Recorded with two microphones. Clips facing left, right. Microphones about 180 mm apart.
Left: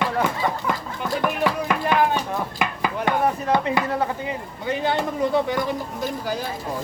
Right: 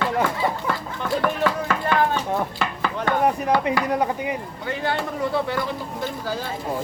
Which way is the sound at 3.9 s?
15° right (ahead or behind).